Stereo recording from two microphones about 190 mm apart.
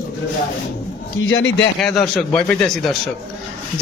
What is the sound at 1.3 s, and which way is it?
Speech, 75° left (ahead or behind).